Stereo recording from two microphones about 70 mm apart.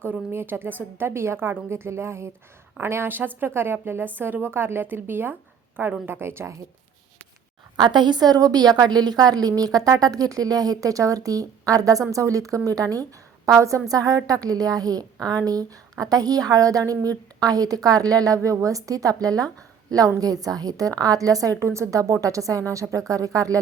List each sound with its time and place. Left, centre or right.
0.3 s a woman's voice: right
7.8 s a woman's voice: right